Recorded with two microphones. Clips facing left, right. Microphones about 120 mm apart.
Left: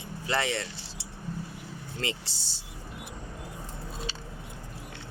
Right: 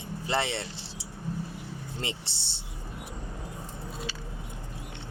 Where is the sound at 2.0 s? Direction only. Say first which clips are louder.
Left 5 dB; 25° right (ahead or behind).